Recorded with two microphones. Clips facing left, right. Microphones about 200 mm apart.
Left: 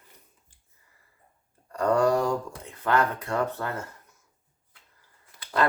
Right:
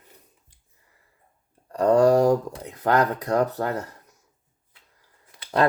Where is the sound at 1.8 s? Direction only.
35° right (ahead or behind).